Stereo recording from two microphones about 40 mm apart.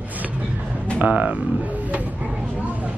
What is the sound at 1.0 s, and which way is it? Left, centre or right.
Speech, right.